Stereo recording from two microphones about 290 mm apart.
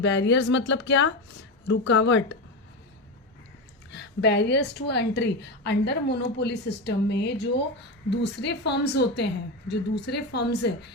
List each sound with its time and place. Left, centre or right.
0.0 s a woman's voice: left
3.9 s a woman's voice: left